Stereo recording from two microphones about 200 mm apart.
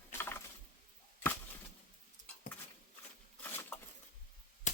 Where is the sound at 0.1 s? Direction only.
10° left (ahead or behind).